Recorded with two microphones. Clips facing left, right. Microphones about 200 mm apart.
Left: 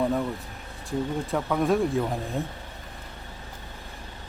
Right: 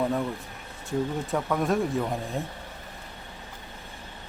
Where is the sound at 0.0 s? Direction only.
Centre (ahead or behind).